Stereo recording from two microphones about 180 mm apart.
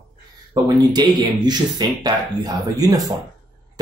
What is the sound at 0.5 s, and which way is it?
Speech, 20° right (ahead or behind).